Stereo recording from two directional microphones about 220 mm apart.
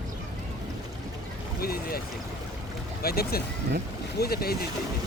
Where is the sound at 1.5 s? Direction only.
45° left (ahead or behind).